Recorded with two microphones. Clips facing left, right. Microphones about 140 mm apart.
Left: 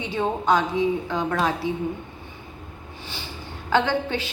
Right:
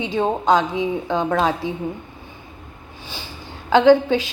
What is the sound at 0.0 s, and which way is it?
A woman's voice, 20° right (ahead or behind).